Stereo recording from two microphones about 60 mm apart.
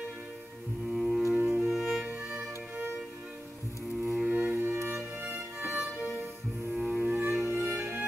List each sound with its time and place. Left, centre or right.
0.9 s music: centre
2.0 s music: right
4.3 s music: right
4.7 s music: right
5.6 s violin: right
6.7 s music: centre
7.0 s music: right